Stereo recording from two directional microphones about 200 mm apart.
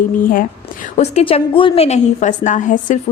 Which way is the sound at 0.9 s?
30° left (ahead or behind).